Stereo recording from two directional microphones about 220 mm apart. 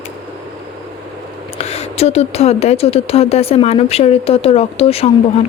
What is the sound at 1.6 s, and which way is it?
Speech, 30° left (ahead or behind).